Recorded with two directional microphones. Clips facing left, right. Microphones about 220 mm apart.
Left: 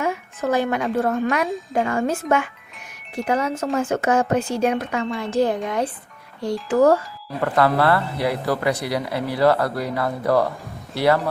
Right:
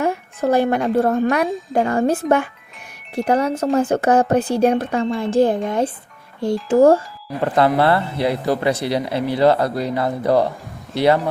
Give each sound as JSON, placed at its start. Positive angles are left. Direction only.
{"t": 0.0, "sound": "speech", "side_deg": -35}
{"t": 3.2, "sound": "speech", "side_deg": -35}